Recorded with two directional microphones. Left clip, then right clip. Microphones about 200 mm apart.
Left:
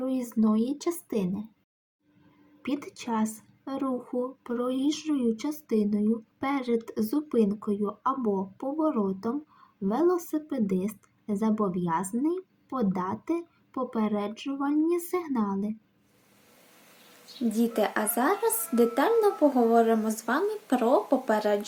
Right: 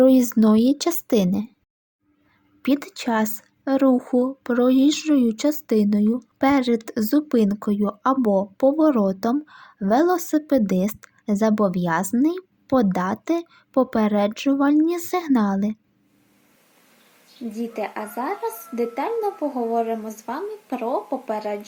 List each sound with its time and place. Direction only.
0.0 s speech: 50° right (ahead or behind)
2.6 s speech: 45° right (ahead or behind)
17.5 s speech: 10° left (ahead or behind)